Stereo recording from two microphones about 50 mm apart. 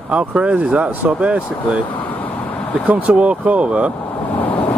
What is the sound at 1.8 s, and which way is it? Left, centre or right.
Vehicle, left.